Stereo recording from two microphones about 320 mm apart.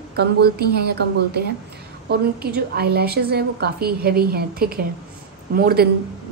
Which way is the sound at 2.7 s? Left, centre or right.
Right.